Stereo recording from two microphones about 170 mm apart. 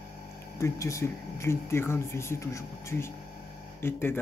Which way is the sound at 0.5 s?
15° left (ahead or behind).